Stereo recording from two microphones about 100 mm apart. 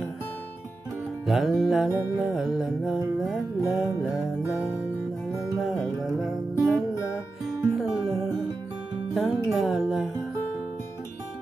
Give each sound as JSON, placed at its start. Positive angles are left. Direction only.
{"t": 1.2, "sound": "music", "side_deg": 0}
{"t": 9.1, "sound": "music", "side_deg": -5}